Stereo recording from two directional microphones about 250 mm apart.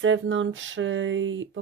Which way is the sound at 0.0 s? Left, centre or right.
Right.